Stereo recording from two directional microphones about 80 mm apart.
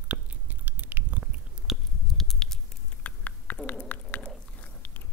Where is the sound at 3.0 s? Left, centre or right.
Centre.